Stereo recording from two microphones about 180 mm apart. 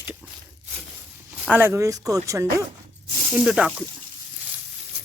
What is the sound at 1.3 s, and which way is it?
Speech, 5° right (ahead or behind).